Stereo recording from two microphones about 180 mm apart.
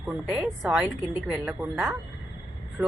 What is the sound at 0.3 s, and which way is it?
A woman's voice, 5° right (ahead or behind).